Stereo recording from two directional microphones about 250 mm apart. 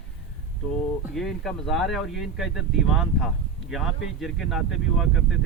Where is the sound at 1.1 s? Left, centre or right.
Centre.